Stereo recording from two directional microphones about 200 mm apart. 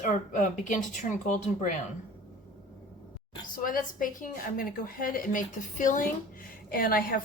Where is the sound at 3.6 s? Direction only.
45° left (ahead or behind).